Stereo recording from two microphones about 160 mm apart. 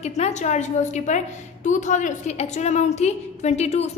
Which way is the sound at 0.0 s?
45° left (ahead or behind).